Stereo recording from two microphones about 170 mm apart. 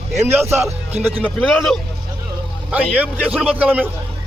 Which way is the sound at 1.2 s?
5° left (ahead or behind).